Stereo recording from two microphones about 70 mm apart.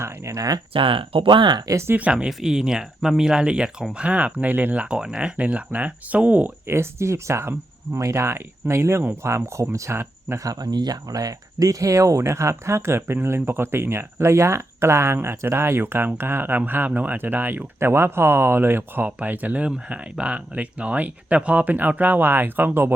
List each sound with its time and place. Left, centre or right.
0.3 s speech: right
1.5 s speech: right
1.9 s speech: right
2.1 s speech: centre
6.7 s speech: right
10.0 s speech: right
10.4 s speech: right